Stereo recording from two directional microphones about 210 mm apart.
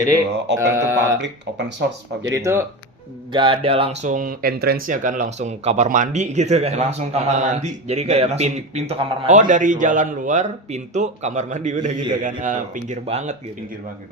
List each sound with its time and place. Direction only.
0.6 s mantra: 15° right (ahead or behind)
2.2 s mantra: 15° right (ahead or behind)
3.3 s speech: 25° right (ahead or behind)